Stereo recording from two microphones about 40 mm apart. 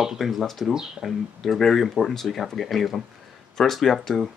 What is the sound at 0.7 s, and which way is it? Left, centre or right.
Speech, centre.